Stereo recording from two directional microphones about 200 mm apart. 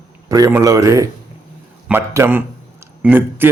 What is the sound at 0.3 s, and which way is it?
Speech, 15° right (ahead or behind).